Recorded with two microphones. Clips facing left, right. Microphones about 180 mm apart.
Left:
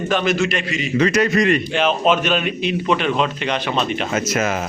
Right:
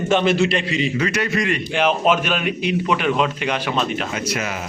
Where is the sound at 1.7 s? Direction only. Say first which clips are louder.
Left 1 dB; 10° right (ahead or behind).